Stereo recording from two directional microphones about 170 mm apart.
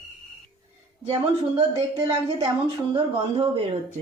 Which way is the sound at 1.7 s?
35° right (ahead or behind).